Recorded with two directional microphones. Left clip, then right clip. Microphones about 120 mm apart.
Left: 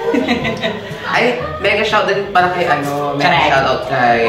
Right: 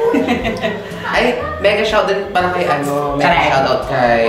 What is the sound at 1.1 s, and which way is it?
A woman's voice, 25° right (ahead or behind).